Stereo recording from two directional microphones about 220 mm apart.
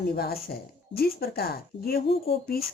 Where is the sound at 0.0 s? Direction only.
45° left (ahead or behind).